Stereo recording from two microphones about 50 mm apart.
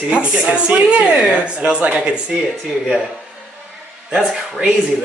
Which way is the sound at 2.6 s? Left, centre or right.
Centre.